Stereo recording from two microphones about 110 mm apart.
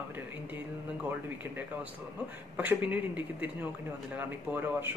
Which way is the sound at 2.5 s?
15° right (ahead or behind).